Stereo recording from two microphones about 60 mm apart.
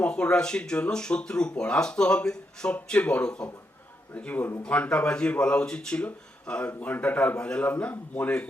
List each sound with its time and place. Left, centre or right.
0.0 s a man's voice: centre
6.7 s a man's voice: left